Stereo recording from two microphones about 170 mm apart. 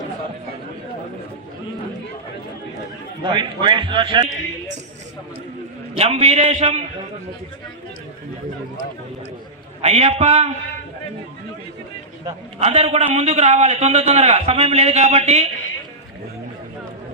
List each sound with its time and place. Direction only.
3.3 s a man's voice: 30° right (ahead or behind)
6.0 s a man's voice: 35° right (ahead or behind)
9.8 s a man's voice: 35° right (ahead or behind)
12.5 s a man's voice: 40° right (ahead or behind)